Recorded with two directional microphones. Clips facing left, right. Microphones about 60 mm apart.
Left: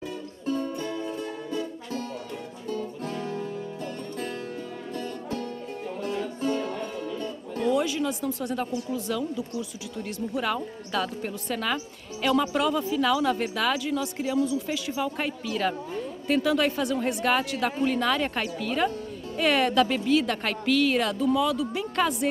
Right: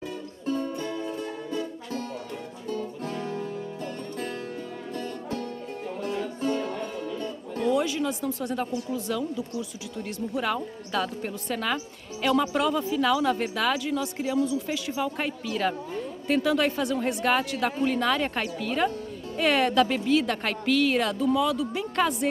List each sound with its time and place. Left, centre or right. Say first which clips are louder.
0.7 s music: even; right
6.0 s music: even; right
7.7 s speech: even; right